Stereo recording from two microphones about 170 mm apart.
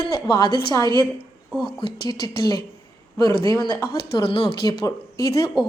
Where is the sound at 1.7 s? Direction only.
30° left (ahead or behind).